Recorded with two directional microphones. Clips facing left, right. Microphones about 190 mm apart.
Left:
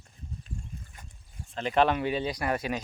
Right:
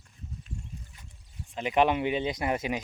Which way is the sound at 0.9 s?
50° left (ahead or behind).